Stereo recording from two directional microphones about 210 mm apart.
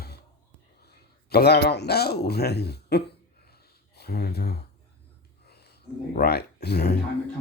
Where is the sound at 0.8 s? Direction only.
50° left (ahead or behind).